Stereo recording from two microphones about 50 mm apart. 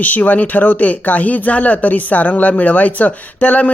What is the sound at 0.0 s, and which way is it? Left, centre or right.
Speech, left.